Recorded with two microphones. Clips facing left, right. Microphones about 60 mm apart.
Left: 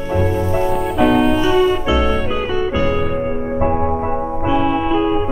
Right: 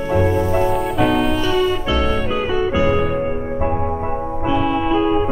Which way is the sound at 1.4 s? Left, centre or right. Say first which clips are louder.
Left 4 dB; centre.